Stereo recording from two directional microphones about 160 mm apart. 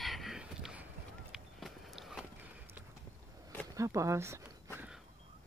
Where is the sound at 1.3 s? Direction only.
Centre (ahead or behind).